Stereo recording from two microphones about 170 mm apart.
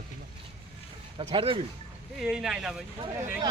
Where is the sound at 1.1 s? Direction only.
30° right (ahead or behind).